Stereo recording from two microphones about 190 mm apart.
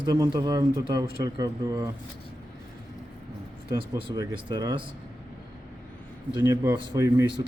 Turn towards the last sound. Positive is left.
turn(degrees=-15)  # may be behind; listen again after turning